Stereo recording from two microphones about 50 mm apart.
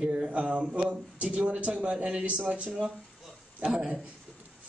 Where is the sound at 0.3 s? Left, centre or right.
Right.